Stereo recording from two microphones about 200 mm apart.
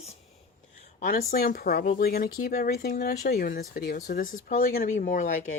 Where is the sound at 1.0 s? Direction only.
45° left (ahead or behind).